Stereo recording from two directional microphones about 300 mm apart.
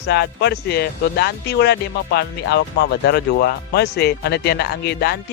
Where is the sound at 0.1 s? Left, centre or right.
Left.